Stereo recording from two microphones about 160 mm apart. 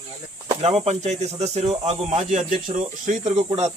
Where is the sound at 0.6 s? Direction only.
40° right (ahead or behind).